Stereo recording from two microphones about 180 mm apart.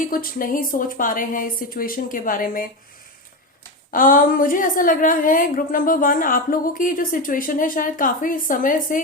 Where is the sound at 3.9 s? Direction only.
50° left (ahead or behind).